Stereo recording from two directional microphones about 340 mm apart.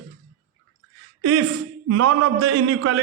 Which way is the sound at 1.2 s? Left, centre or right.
Right.